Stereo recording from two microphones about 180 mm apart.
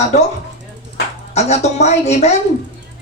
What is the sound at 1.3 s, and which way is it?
Speech, 40° left (ahead or behind).